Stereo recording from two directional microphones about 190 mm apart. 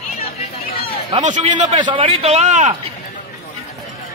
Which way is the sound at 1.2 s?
40° right (ahead or behind).